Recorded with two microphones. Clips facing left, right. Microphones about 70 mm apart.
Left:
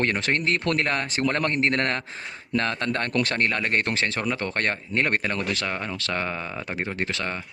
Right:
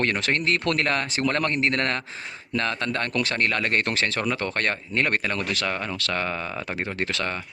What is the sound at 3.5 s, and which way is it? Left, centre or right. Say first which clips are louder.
Speech: even; left.